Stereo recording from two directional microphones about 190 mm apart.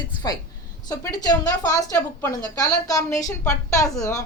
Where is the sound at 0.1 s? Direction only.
20° left (ahead or behind).